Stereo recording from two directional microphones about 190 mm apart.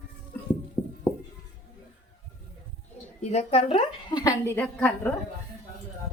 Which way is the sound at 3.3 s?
30° left (ahead or behind).